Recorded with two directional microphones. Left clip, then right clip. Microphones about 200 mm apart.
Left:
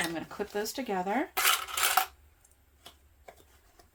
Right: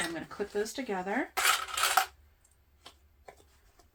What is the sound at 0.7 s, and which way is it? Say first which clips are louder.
Speech: left 2 dB; 35° left (ahead or behind).